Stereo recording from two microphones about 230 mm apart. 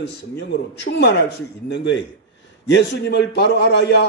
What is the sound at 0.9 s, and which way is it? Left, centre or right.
Speech, left.